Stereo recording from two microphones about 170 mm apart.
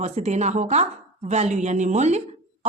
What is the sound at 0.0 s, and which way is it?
Speech, 40° right (ahead or behind).